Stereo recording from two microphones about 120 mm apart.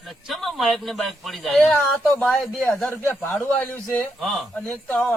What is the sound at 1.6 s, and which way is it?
A man's voice, 10° left (ahead or behind).